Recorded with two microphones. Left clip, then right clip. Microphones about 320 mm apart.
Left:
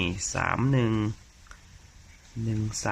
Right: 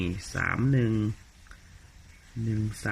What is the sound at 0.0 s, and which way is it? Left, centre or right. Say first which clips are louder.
Speech: left 2 dB; centre.